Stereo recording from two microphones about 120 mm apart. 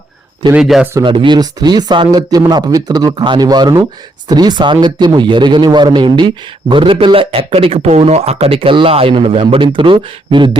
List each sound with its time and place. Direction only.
0.6 s speech: centre (ahead or behind)
1.0 s a man's voice: 45° right (ahead or behind)